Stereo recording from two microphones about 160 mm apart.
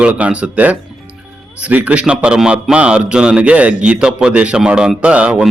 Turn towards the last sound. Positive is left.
turn(degrees=-5)  # may be behind; listen again after turning